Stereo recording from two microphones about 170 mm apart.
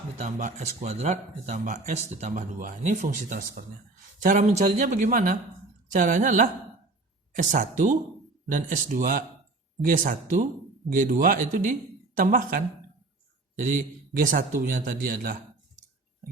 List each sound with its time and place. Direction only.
0.2 s a man's voice: 45° right (ahead or behind)